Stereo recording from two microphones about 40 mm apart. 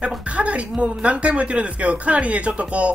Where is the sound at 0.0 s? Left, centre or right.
Right.